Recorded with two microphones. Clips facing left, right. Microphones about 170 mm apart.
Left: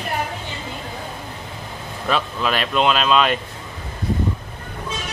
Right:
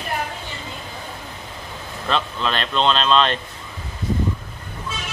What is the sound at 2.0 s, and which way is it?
Speech, 10° left (ahead or behind).